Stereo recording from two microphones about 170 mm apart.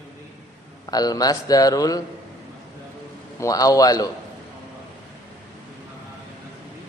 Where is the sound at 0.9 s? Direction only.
20° left (ahead or behind).